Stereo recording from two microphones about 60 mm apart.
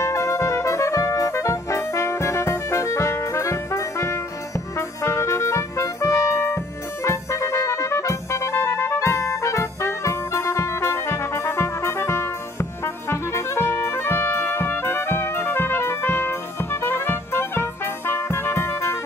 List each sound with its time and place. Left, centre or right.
0.0 s music: left